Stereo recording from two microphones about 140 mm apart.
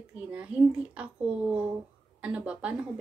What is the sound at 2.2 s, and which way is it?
Speech, 10° right (ahead or behind).